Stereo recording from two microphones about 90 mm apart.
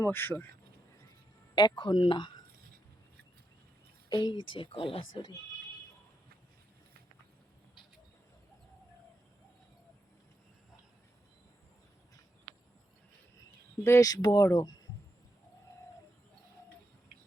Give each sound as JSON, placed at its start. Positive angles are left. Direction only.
{"t": 0.0, "sound": "speech", "side_deg": 25}
{"t": 1.5, "sound": "speech", "side_deg": 60}
{"t": 4.1, "sound": "speech", "side_deg": 55}
{"t": 13.8, "sound": "speech", "side_deg": 35}
{"t": 14.4, "sound": "speech", "side_deg": 40}